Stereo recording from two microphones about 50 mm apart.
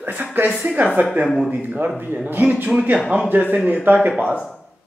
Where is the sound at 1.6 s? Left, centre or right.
Right.